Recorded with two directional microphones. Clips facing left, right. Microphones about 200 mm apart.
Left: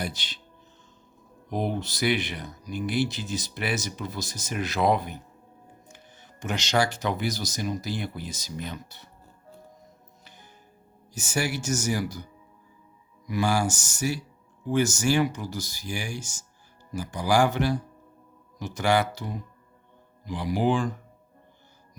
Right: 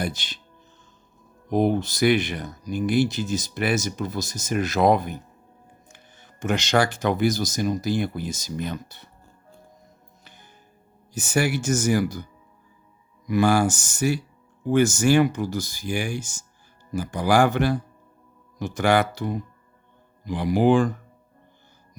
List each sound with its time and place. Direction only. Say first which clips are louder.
0.0 s speech: right 5 dB; 50° right (ahead or behind)
1.5 s speech: right 8 dB; 50° right (ahead or behind)
11.1 s speech: right 6 dB; 55° right (ahead or behind)
13.2 s speech: right 6 dB; 55° right (ahead or behind)